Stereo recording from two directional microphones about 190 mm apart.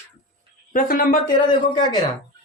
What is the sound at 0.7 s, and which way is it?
Speech, 45° left (ahead or behind).